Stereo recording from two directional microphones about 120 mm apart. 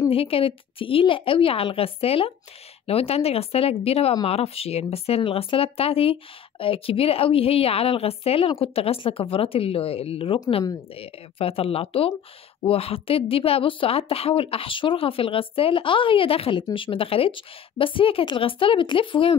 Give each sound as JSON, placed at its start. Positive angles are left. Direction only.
{"t": 0.1, "sound": "a woman's voice", "side_deg": 50}